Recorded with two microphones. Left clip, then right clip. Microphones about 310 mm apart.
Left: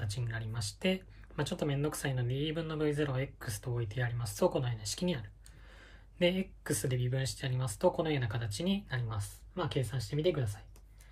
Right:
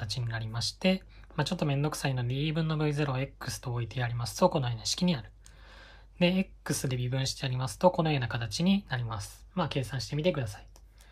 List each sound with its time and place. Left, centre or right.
0.0 s speech: centre